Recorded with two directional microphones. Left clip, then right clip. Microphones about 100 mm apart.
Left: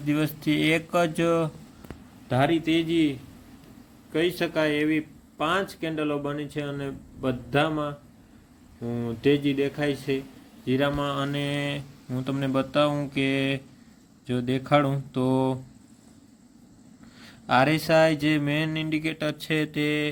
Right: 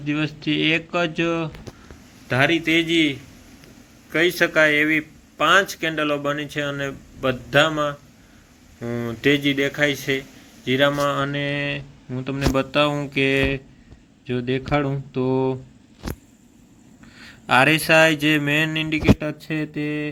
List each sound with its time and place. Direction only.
0.0 s a man's voice: 20° left (ahead or behind)
2.6 s speech: 10° left (ahead or behind); by 11.3 s 5° right (ahead or behind)
11.3 s speech: 5° left (ahead or behind)
12.5 s speech: 5° right (ahead or behind)
17.2 s speech: centre (ahead or behind)